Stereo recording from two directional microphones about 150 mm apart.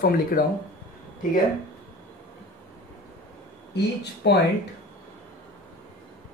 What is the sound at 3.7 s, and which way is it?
Speech, 90° left.